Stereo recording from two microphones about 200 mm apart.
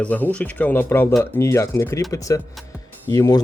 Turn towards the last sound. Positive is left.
turn(degrees=20)  # may be behind; listen again after turning